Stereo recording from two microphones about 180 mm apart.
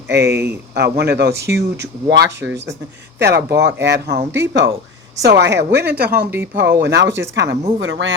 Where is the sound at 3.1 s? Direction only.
70° right (ahead or behind).